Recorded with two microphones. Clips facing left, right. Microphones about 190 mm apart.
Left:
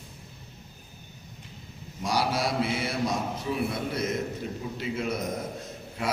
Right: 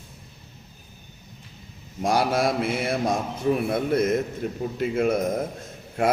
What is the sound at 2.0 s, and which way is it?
A man's voice, 50° right (ahead or behind).